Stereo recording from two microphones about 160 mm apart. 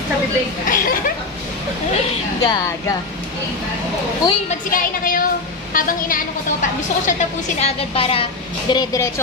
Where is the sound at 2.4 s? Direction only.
25° left (ahead or behind).